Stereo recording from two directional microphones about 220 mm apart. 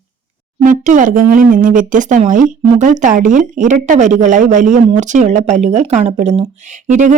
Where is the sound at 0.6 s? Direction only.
35° right (ahead or behind).